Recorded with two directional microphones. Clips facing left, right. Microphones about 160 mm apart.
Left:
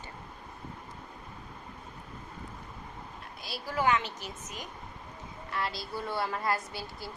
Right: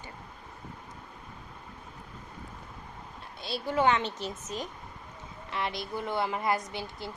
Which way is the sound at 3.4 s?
25° right (ahead or behind).